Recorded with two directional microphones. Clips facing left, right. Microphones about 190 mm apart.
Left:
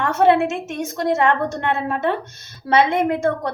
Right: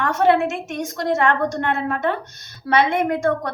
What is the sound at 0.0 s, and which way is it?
A woman's voice, 25° left (ahead or behind).